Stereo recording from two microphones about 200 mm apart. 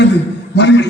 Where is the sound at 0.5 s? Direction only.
60° left (ahead or behind).